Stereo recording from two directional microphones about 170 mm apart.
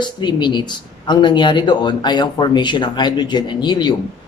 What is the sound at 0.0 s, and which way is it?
Speech, 25° left (ahead or behind).